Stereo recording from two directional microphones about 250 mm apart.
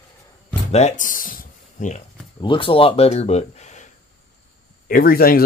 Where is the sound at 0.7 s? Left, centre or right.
Left.